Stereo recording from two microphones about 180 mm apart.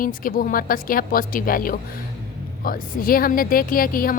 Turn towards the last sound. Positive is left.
turn(degrees=50)  # may be behind; listen again after turning